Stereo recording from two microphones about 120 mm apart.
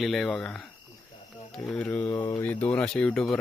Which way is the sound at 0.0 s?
Centre (ahead or behind).